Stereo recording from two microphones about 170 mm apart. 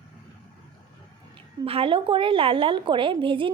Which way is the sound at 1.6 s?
35° right (ahead or behind).